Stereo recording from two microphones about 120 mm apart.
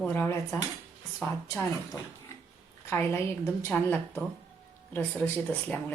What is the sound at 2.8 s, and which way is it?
Speech, 20° left (ahead or behind).